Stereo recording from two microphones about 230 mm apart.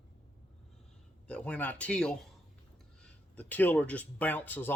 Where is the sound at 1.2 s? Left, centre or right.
Centre.